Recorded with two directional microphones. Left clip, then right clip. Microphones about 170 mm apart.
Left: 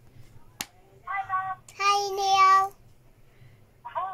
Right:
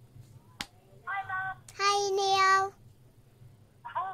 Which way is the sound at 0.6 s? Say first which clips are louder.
Left 3 dB; 30° left (ahead or behind).